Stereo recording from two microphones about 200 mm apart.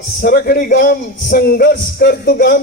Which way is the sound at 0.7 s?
55° left (ahead or behind).